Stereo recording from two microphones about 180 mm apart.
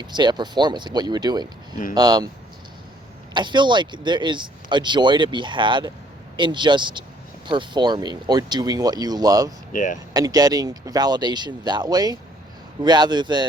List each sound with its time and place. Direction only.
0.0 s speech: 25° right (ahead or behind)
3.3 s speech: 25° right (ahead or behind)
9.7 s speech: 45° left (ahead or behind)
10.2 s speech: 20° right (ahead or behind)